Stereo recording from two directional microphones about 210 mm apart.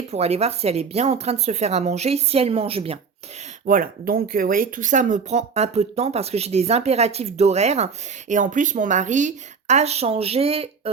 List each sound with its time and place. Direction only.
0.1 s a woman's voice: 30° right (ahead or behind)
3.7 s speech: 40° right (ahead or behind)